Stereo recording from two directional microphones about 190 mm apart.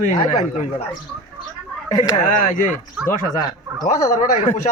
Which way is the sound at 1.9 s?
20° left (ahead or behind).